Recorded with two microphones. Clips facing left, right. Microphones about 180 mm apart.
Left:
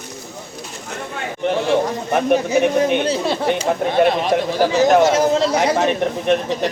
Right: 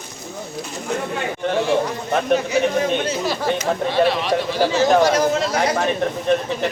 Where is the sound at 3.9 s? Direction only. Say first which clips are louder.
Left 3 dB; 50° left (ahead or behind).